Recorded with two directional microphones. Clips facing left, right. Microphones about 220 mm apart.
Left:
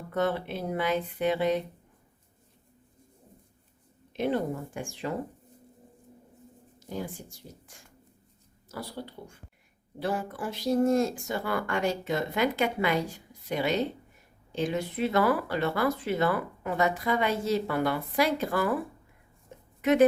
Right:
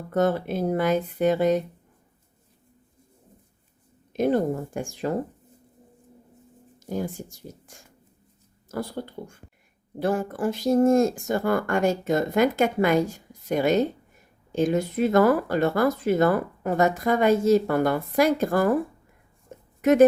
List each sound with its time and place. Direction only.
0.1 s speech: 45° right (ahead or behind)
4.1 s speech: 45° right (ahead or behind)
6.8 s speech: 45° right (ahead or behind)
19.5 s a sound: 45° right (ahead or behind)